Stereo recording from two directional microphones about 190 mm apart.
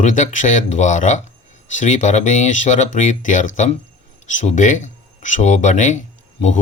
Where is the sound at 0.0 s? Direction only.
40° left (ahead or behind).